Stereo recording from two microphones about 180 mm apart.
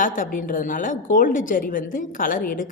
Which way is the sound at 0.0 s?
50° left (ahead or behind).